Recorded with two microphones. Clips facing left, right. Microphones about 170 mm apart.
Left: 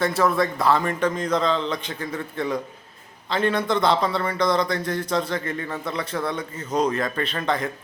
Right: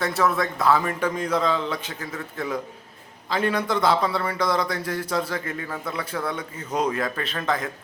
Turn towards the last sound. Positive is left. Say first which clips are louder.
# left 2 dB
turn(degrees=0)  # may be behind; listen again after turning